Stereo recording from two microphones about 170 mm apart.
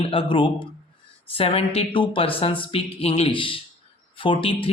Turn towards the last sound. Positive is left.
turn(degrees=30)  # may be behind; listen again after turning